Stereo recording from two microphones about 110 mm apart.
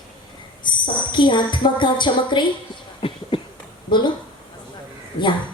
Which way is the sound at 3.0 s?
50° left (ahead or behind).